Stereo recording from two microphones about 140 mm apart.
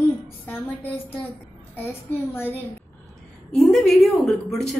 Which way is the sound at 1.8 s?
15° left (ahead or behind).